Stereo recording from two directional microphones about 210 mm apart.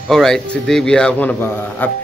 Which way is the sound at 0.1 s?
Centre (ahead or behind).